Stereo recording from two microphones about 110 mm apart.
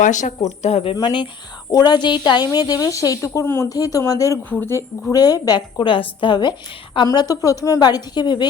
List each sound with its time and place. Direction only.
0.1 s speech: 90° left; by 0.9 s 65° left (ahead or behind)
0.9 s a woman's voice: 45° left (ahead or behind)